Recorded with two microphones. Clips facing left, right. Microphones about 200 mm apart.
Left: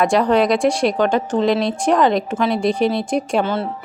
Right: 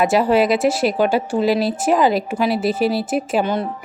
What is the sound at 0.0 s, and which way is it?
Speech, 5° right (ahead or behind).